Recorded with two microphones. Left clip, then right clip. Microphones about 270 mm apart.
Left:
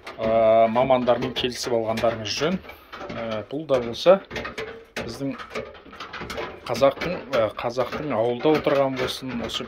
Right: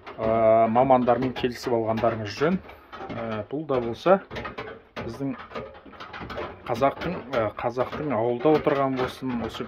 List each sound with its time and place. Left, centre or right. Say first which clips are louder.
0.2 s speech: left 2 dB; centre
6.7 s speech: left 4 dB; centre